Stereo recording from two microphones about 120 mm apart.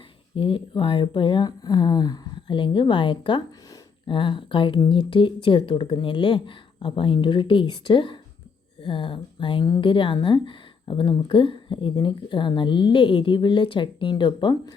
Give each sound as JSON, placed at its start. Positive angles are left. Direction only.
{"t": 0.3, "sound": "speech", "side_deg": 45}